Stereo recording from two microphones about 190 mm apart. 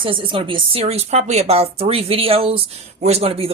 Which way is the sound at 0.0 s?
25° right (ahead or behind).